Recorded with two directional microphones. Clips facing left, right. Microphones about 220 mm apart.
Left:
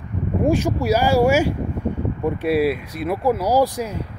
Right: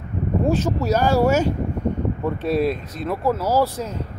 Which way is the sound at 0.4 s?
10° left (ahead or behind).